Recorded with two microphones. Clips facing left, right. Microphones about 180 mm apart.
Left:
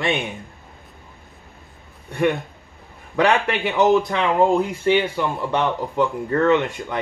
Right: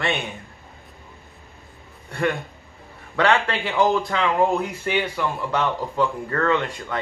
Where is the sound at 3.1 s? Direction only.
15° left (ahead or behind).